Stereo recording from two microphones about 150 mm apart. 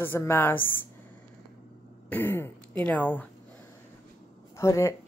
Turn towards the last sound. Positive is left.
turn(degrees=20)  # may be behind; listen again after turning